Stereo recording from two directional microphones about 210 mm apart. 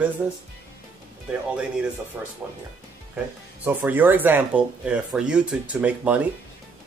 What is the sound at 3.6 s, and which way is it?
Speech, 10° right (ahead or behind).